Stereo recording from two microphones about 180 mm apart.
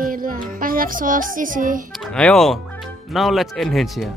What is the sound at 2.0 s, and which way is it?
Speech, 5° left (ahead or behind).